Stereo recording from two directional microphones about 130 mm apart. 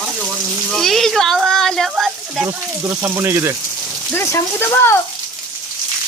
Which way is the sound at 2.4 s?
20° right (ahead or behind).